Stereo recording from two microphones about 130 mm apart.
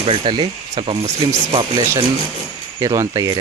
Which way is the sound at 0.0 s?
45° right (ahead or behind).